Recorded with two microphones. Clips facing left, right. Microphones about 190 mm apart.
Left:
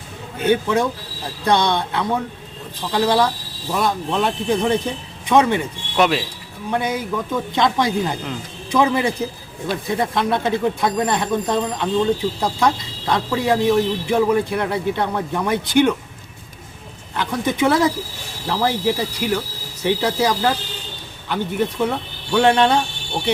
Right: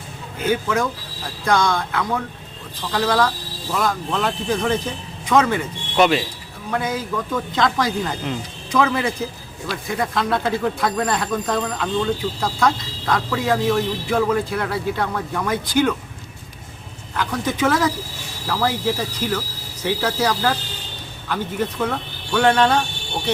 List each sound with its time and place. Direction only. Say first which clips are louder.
0.3 s speech: left 3 dB; 25° left (ahead or behind)
6.0 s speech: right 1 dB; centre (ahead or behind)
6.7 s speech: left 2 dB; 20° left (ahead or behind)
17.2 s speech: left 2 dB; 20° left (ahead or behind)